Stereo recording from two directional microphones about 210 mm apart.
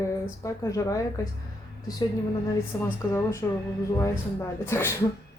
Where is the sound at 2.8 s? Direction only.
10° left (ahead or behind).